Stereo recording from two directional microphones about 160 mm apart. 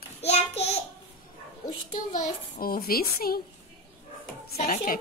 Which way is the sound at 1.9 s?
55° left (ahead or behind).